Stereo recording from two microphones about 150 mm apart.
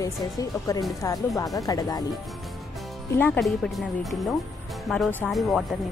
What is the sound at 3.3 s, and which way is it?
Speech, centre (ahead or behind).